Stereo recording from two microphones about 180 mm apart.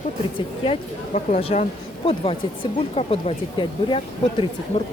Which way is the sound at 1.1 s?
40° left (ahead or behind).